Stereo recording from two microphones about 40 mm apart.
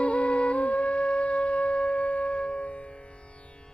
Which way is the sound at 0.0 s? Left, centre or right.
Left.